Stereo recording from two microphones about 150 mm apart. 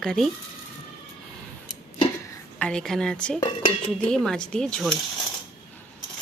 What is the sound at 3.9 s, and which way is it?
Speech, 5° left (ahead or behind).